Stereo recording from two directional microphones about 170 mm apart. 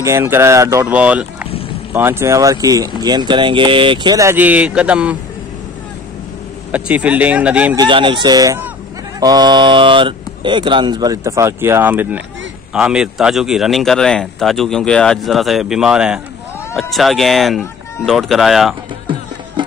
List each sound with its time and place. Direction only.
0.0 s speech: 15° right (ahead or behind)
6.7 s speech: 10° right (ahead or behind)
7.7 s speech: 25° right (ahead or behind); by 18.8 s centre (ahead or behind)